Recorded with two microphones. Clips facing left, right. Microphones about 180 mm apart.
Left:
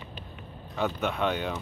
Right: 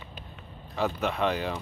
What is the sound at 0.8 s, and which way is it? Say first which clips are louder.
Speech: right 1 dB; centre (ahead or behind).